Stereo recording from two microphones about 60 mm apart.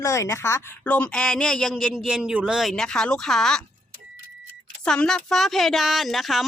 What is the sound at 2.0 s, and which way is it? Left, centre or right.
Speech, centre.